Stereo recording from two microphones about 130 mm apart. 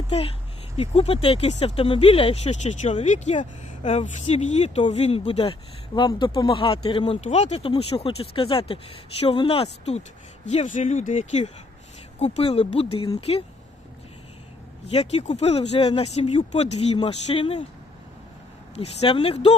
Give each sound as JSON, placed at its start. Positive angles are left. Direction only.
{"t": 0.1, "sound": "speech", "side_deg": 50}
{"t": 10.4, "sound": "speech", "side_deg": 60}
{"t": 14.8, "sound": "speech", "side_deg": 55}
{"t": 18.8, "sound": "speech", "side_deg": 50}